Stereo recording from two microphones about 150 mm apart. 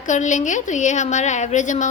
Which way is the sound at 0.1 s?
55° left (ahead or behind).